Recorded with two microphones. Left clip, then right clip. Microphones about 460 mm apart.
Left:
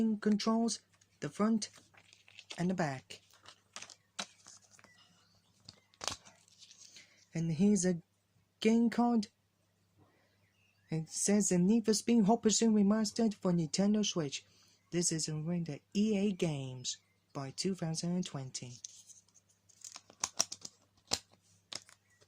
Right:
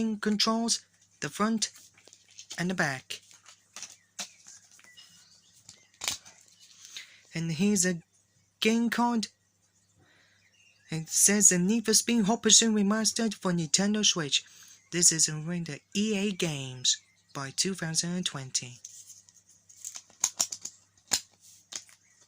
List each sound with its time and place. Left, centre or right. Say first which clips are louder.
0.0 s speech: right 5 dB; left
6.9 s a sound: right 7 dB; left
8.5 s speech: right 4 dB; left
10.8 s speech: right 8 dB; left
19.9 s typing: right 8 dB; left